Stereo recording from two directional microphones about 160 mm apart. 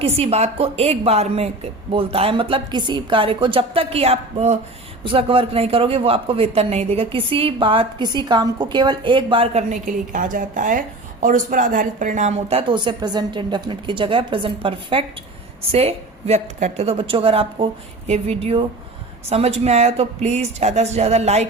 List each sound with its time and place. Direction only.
0.0 s speech: 40° right (ahead or behind)